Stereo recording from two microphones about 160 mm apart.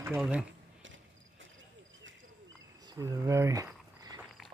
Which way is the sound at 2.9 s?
20° right (ahead or behind).